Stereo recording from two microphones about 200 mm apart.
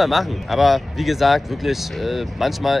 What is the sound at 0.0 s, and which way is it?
Speech, centre (ahead or behind).